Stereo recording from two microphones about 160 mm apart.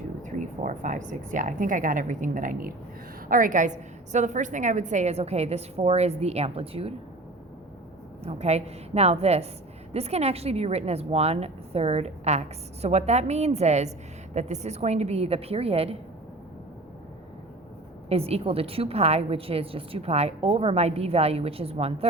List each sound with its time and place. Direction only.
0.2 s a woman's voice: 50° right (ahead or behind)
8.2 s a woman's voice: 40° right (ahead or behind)
18.1 s a woman's voice: 40° right (ahead or behind)